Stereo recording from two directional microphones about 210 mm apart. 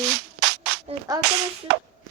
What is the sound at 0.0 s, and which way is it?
Music, 50° right (ahead or behind).